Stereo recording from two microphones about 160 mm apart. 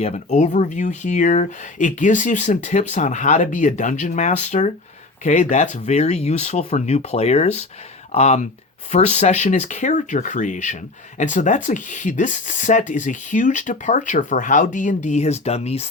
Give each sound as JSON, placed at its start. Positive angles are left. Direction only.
{"t": 0.0, "sound": "speech", "side_deg": 45}